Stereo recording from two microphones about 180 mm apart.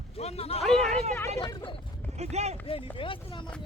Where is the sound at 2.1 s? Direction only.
35° right (ahead or behind).